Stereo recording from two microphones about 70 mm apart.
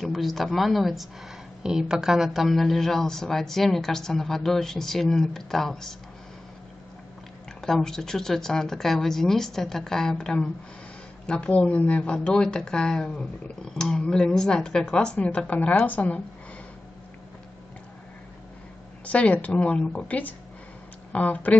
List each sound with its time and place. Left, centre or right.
0.0 s speech: centre
7.6 s a woman's voice: centre; by 16.2 s left
19.0 s a woman's voice: centre